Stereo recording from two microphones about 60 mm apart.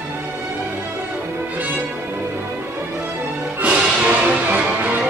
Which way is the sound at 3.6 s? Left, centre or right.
Right.